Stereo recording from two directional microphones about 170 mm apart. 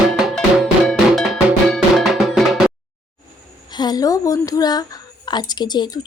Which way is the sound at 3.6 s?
25° left (ahead or behind).